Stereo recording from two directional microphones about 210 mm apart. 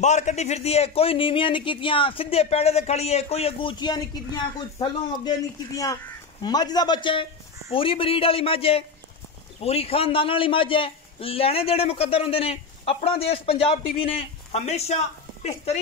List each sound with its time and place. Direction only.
0.0 s a man's voice: 35° left (ahead or behind)
6.4 s a man's voice: 20° left (ahead or behind)